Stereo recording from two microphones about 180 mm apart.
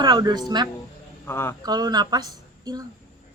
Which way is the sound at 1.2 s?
15° left (ahead or behind).